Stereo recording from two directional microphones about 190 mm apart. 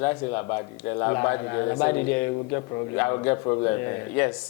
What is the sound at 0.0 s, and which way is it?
Speech, 20° left (ahead or behind).